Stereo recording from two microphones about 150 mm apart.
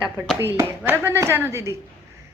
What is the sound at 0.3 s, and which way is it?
A woman's voice, 15° right (ahead or behind).